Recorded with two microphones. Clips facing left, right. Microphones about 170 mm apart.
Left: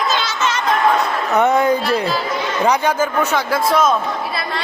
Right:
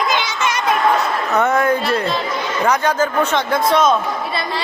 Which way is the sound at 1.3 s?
15° left (ahead or behind).